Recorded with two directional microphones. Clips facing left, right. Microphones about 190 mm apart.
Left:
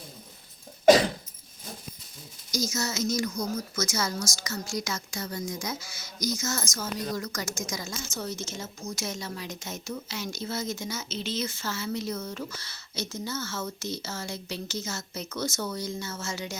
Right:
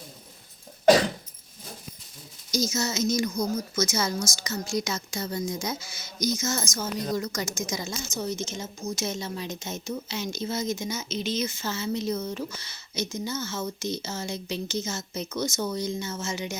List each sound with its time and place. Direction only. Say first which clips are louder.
2.5 s speech: right 3 dB; 25° right (ahead or behind)